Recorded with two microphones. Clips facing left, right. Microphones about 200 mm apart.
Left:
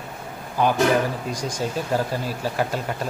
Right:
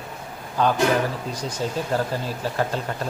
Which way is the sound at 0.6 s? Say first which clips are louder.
Left 1 dB; 10° left (ahead or behind).